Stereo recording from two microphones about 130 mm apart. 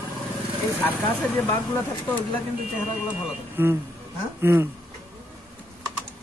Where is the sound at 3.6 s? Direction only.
15° right (ahead or behind).